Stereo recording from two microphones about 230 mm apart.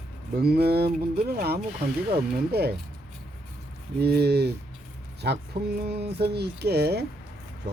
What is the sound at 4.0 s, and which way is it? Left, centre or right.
Speech, right.